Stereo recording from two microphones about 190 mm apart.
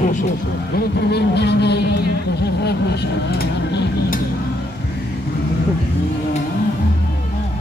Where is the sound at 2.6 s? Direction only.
60° left (ahead or behind).